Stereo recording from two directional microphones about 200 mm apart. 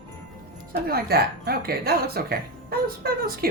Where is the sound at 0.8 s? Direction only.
50° right (ahead or behind).